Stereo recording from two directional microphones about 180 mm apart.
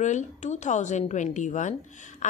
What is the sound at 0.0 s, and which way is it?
A woman's voice, 40° left (ahead or behind).